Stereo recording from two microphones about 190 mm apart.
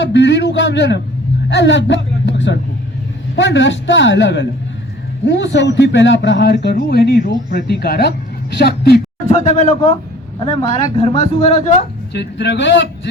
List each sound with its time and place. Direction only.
0.0 s a man's voice: 65° left (ahead or behind)
9.3 s speech: 35° left (ahead or behind)
10.4 s speech: 25° left (ahead or behind)
11.8 s a woman's voice: 65° left (ahead or behind)